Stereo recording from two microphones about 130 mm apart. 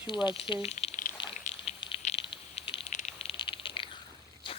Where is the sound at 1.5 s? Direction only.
55° left (ahead or behind); by 3.8 s 40° left (ahead or behind).